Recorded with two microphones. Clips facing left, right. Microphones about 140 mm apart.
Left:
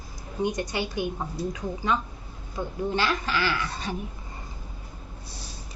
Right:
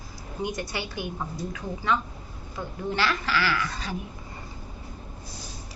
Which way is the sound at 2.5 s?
20° left (ahead or behind).